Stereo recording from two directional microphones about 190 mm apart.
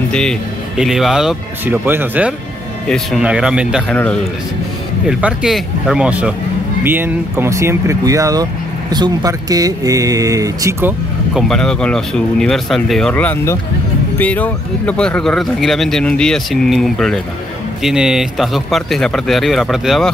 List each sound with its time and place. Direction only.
0.1 s speech: 5° left (ahead or behind)
3.9 s a man's voice: 5° left (ahead or behind)
5.0 s speech: 5° right (ahead or behind)
11.3 s speech: centre (ahead or behind)